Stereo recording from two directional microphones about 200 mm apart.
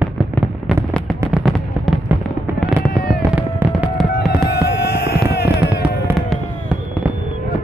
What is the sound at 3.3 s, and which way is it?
Fireworks, 5° right (ahead or behind).